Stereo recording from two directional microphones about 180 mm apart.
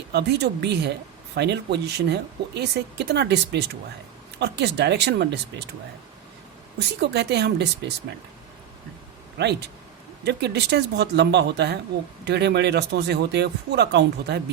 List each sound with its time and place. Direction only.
0.1 s speech: 70° right (ahead or behind)
6.7 s speech: 70° right (ahead or behind)
9.4 s speech: 65° right (ahead or behind)